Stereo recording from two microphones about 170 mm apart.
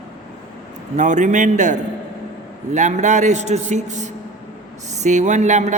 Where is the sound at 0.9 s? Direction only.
45° right (ahead or behind).